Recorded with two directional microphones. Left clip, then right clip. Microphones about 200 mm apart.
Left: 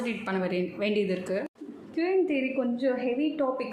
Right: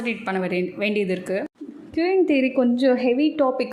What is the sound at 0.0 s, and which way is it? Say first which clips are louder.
A woman's voice: right 5 dB; 30° right (ahead or behind).